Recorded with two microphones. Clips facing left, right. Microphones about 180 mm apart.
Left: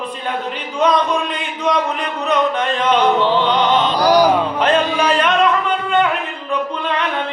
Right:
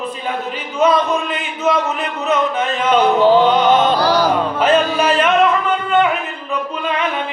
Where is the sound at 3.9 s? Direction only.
15° left (ahead or behind).